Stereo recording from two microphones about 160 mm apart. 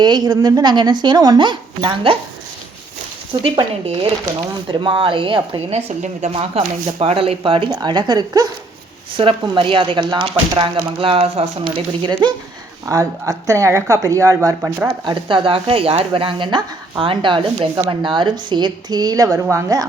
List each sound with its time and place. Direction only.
0.0 s speech: 25° right (ahead or behind)
3.4 s speech: 30° right (ahead or behind)
15.0 s speech: 30° right (ahead or behind)